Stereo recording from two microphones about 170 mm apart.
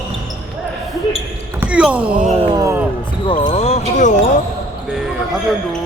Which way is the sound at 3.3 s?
30° left (ahead or behind).